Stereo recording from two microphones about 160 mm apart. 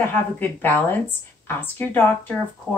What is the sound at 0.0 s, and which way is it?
Speech, 10° left (ahead or behind).